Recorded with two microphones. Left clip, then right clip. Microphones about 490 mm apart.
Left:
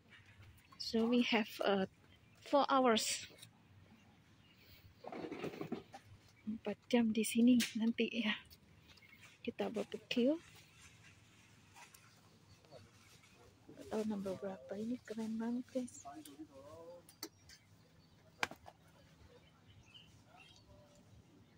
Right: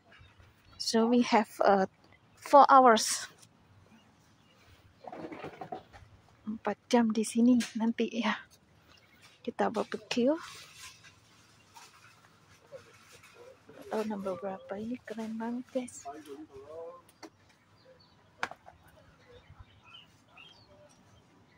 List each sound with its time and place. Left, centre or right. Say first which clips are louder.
0.7 s speech: right 8 dB; left
6.6 s speech: right 8 dB; left
9.4 s speech: right 10 dB; left
13.8 s speech: right 7 dB; left
18.4 s a sound: right 4 dB; left